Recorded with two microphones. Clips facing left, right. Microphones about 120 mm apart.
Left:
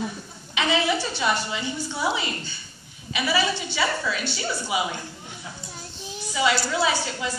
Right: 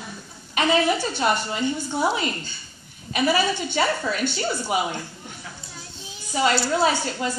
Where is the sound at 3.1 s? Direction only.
50° right (ahead or behind).